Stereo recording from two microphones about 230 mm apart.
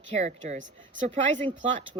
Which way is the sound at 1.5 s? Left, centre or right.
Right.